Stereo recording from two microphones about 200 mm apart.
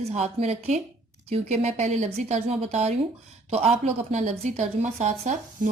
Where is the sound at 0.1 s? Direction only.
35° right (ahead or behind).